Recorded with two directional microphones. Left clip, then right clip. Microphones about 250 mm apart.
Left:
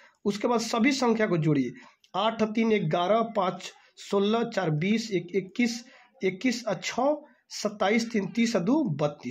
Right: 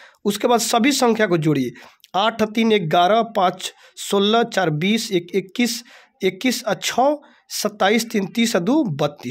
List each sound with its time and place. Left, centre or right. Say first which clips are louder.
0.2 s speech: right 9 dB; right